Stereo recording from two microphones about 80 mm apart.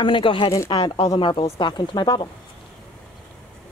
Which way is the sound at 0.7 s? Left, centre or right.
Left.